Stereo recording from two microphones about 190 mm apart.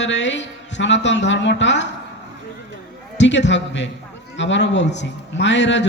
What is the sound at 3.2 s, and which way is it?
Speech, 70° left (ahead or behind).